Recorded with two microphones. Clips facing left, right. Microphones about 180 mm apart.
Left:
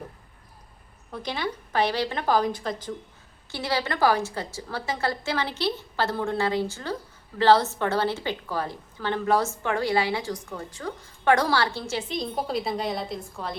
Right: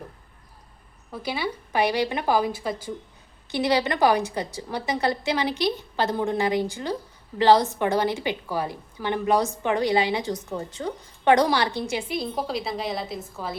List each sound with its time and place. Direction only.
1.1 s a woman's voice: 5° right (ahead or behind)